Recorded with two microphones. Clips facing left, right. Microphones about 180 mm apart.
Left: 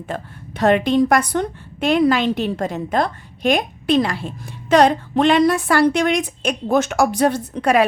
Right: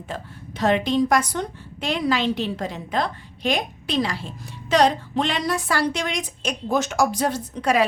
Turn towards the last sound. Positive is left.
turn(degrees=55)  # may be behind; listen again after turning